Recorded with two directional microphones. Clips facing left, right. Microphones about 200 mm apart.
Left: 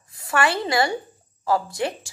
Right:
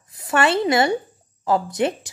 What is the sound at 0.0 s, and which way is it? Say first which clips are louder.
A woman's voice: right 3 dB; 20° right (ahead or behind).